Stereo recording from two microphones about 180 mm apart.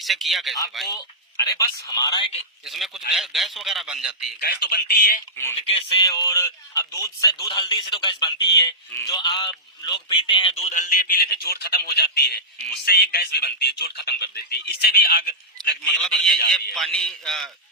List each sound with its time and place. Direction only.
0.0 s a man's voice: centre (ahead or behind)
1.5 s speech: 20° left (ahead or behind)
2.6 s a man's voice: centre (ahead or behind)
4.4 s speech: 60° left (ahead or behind)
5.5 s speech: 30° left (ahead or behind); by 15.7 s 55° left (ahead or behind)
15.8 s a man's voice: 5° left (ahead or behind)